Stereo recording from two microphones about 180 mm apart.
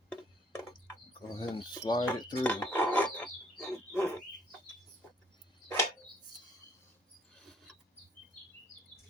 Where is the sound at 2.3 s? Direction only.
10° left (ahead or behind).